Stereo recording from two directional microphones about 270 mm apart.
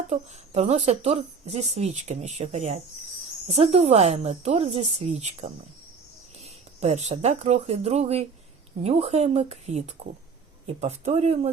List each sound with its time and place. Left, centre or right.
0.1 s speech: right